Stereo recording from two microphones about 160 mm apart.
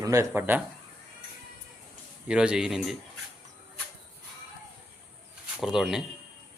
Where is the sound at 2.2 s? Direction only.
5° right (ahead or behind).